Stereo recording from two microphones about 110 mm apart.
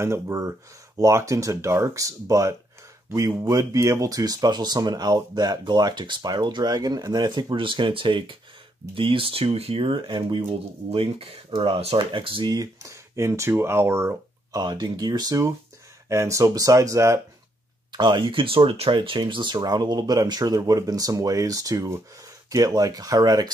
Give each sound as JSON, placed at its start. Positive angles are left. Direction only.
{"t": 0.0, "sound": "speech", "side_deg": -25}
{"t": 10.9, "sound": "speech", "side_deg": -60}
{"t": 12.4, "sound": "speech", "side_deg": -30}
{"t": 14.6, "sound": "speech", "side_deg": -40}
{"t": 17.9, "sound": "speech", "side_deg": -45}